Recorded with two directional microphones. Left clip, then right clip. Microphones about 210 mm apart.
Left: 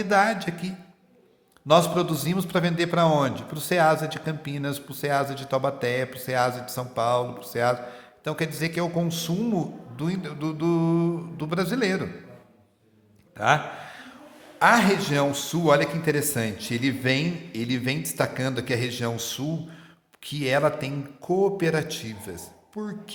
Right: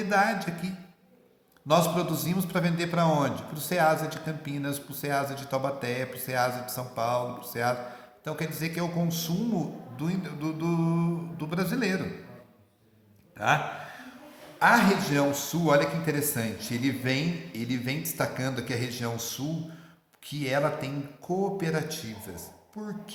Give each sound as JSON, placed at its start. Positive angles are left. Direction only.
{"t": 0.1, "sound": "a man's voice", "side_deg": 35}
{"t": 13.3, "sound": "a sound", "side_deg": 35}
{"t": 14.6, "sound": "a man's voice", "side_deg": 40}